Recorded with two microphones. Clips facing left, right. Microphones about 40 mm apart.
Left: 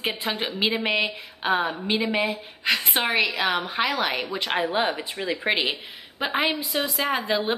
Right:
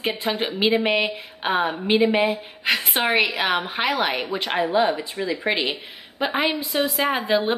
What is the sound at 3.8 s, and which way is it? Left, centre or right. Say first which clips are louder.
Speech: right 2 dB; centre.